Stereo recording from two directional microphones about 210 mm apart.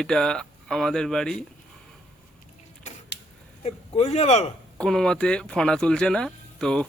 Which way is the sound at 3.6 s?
30° left (ahead or behind).